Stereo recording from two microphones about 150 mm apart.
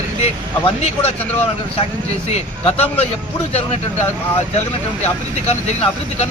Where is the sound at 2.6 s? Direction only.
40° left (ahead or behind).